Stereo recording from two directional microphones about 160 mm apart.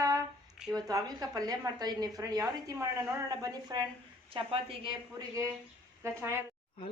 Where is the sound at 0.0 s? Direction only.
20° right (ahead or behind).